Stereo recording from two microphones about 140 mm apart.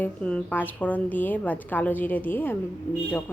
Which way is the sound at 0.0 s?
15° left (ahead or behind).